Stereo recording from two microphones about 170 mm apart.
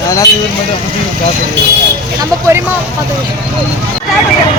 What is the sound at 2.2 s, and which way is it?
Speech, 15° right (ahead or behind).